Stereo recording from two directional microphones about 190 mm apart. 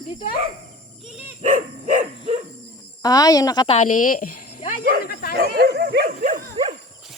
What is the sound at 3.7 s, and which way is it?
Speech, 40° left (ahead or behind).